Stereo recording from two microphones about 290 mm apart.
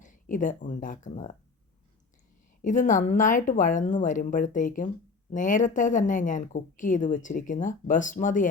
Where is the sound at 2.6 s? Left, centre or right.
Left.